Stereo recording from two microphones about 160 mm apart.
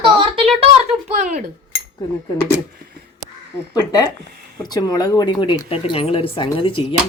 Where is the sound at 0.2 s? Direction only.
35° right (ahead or behind).